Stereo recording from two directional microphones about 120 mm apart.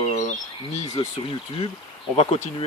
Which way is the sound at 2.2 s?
75° left (ahead or behind).